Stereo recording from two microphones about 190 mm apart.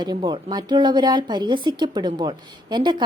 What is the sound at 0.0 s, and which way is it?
A woman's voice, 25° right (ahead or behind).